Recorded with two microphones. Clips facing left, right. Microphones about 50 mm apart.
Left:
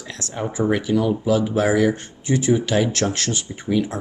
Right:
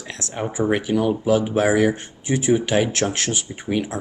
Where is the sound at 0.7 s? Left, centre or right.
Right.